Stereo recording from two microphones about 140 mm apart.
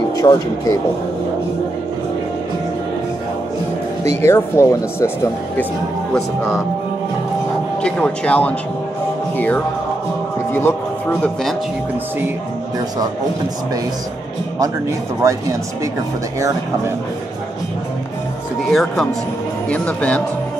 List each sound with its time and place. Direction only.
0.2 s speech: 25° left (ahead or behind)
4.2 s speech: 20° left (ahead or behind)
7.8 s speech: 10° left (ahead or behind)
10.5 s speech: 10° left (ahead or behind)
14.6 s speech: 20° right (ahead or behind)
16.3 s speech: 20° right (ahead or behind)
18.7 s speech: centre (ahead or behind)